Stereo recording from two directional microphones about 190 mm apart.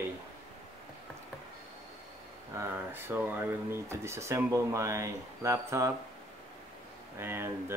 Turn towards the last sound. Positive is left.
turn(degrees=-10)  # may be behind; listen again after turning